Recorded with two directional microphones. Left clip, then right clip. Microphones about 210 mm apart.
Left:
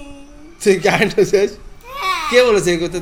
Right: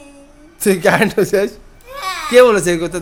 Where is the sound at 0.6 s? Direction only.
45° right (ahead or behind).